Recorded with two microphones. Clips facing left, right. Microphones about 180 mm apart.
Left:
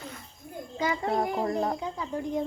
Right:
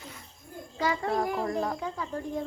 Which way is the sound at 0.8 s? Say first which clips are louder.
Even; 20° left (ahead or behind).